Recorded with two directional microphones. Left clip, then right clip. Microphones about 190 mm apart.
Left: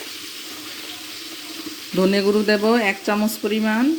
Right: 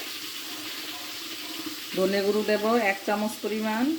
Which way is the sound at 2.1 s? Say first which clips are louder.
Left 7 dB; 50° left (ahead or behind).